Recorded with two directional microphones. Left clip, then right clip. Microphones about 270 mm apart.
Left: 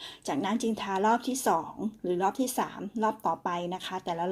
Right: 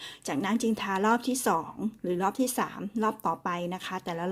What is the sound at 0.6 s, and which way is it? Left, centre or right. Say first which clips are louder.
Speech: even; right.